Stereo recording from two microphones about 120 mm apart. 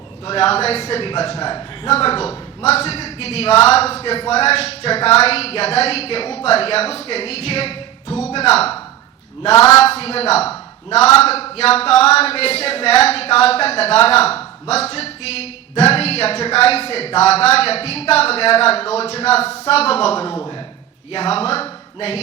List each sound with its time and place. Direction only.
0.3 s speech: 60° left (ahead or behind)
1.5 s a man's voice: 40° left (ahead or behind)
1.9 s speech: 55° left (ahead or behind)
10.0 s speech: 60° left (ahead or behind)